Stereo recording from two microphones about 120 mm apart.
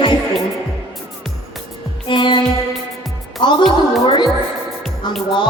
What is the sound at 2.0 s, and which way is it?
Music, 40° left (ahead or behind).